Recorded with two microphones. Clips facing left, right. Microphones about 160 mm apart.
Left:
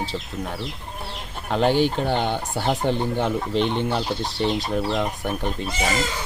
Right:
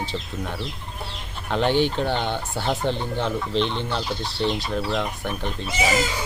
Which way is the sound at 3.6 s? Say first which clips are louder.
Left 3 dB; 50° left (ahead or behind).